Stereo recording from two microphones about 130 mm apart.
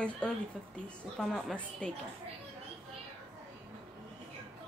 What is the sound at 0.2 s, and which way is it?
A woman's voice, 5° left (ahead or behind).